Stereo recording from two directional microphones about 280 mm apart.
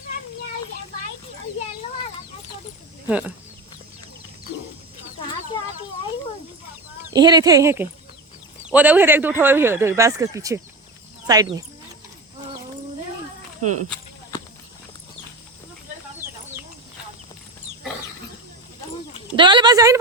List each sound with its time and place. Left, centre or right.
3.1 s speech: centre
7.0 s speech: centre
13.6 s speech: right
13.9 s walk: centre
19.4 s speech: centre